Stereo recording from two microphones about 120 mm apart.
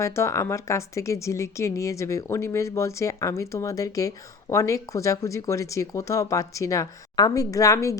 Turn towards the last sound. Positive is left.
turn(degrees=25)  # may be behind; listen again after turning